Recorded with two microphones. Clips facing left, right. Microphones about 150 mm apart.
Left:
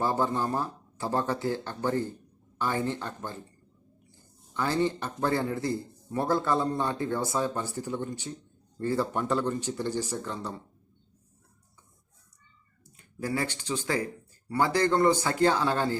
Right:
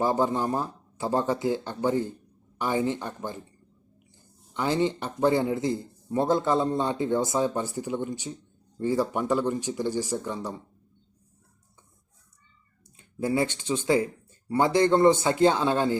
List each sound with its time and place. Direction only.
0.0 s a man's voice: 15° right (ahead or behind)
4.5 s a man's voice: 20° right (ahead or behind)
13.0 s speech: 25° right (ahead or behind)